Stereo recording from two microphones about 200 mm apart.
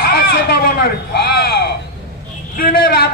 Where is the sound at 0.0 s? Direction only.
50° left (ahead or behind).